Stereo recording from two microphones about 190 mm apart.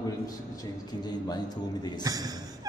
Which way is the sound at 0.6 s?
20° left (ahead or behind).